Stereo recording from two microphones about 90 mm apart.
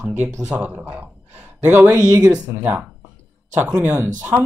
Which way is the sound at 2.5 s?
25° right (ahead or behind).